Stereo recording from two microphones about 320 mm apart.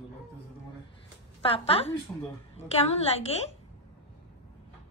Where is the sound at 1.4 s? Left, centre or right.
Centre.